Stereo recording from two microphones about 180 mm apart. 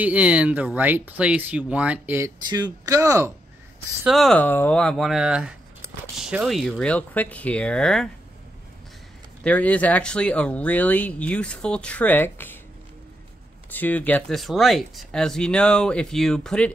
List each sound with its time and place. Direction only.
0.0 s speech: 5° right (ahead or behind)
2.4 s speech: 25° right (ahead or behind)
4.0 s speech: centre (ahead or behind)
9.4 s speech: 10° left (ahead or behind)
13.7 s speech: 10° left (ahead or behind)